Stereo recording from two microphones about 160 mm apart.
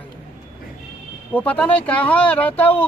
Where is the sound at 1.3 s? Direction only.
10° left (ahead or behind).